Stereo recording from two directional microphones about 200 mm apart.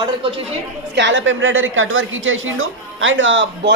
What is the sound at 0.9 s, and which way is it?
A woman's voice, 65° right (ahead or behind).